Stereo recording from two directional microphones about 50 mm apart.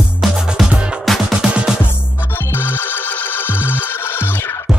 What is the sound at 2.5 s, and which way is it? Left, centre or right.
Music, left.